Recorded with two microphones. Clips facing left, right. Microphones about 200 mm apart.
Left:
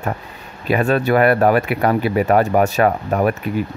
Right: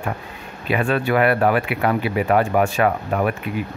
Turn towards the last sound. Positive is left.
turn(degrees=40)  # may be behind; listen again after turning